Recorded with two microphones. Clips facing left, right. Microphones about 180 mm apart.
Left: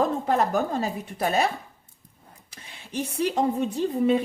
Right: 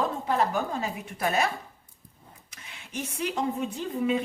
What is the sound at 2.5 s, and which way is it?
Speech, 30° left (ahead or behind).